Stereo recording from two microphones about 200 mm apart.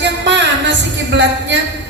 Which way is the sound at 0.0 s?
60° right (ahead or behind).